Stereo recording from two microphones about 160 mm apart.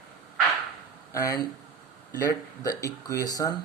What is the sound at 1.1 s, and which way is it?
Speech, 20° left (ahead or behind).